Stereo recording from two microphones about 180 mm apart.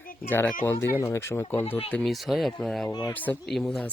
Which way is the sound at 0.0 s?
50° left (ahead or behind).